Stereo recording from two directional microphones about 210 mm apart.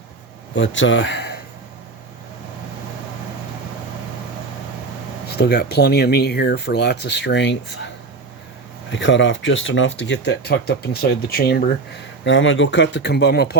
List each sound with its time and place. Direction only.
0.5 s speech: 60° left (ahead or behind)
5.4 s speech: 50° left (ahead or behind)
8.9 s speech: 60° left (ahead or behind)
12.2 s speech: 60° left (ahead or behind)